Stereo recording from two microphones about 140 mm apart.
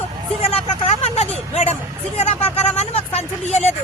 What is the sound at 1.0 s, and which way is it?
Vehicle, 50° left (ahead or behind).